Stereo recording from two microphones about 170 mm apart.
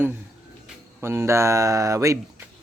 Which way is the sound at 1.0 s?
15° right (ahead or behind).